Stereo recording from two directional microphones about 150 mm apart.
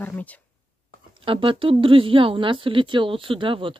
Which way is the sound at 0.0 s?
10° left (ahead or behind).